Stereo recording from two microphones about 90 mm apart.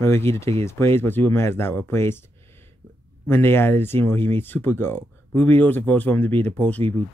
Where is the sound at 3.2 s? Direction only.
25° left (ahead or behind).